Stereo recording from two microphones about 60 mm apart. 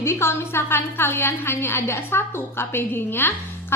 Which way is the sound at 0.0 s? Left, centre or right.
Left.